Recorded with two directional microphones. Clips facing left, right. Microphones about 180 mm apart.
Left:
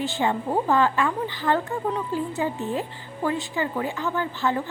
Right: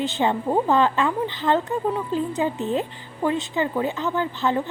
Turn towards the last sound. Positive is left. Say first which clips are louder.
# right 2 dB
turn(degrees=-20)  # may be behind; listen again after turning